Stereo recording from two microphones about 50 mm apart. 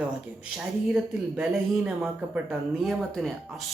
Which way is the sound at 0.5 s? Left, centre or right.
Centre.